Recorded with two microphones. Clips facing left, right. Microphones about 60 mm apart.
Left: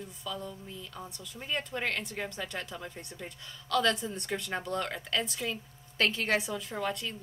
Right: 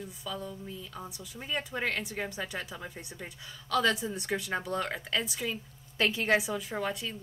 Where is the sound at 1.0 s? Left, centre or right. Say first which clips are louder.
Even; centre.